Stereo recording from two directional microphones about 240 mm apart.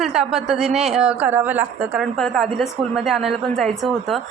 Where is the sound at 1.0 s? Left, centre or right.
Centre.